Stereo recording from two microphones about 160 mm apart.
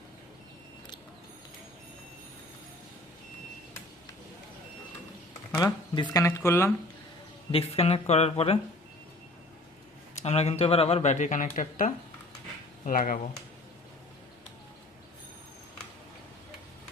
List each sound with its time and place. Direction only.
5.5 s speech: 25° left (ahead or behind)
7.5 s speech: 40° left (ahead or behind)
10.2 s speech: 40° left (ahead or behind); by 13.1 s 60° left (ahead or behind)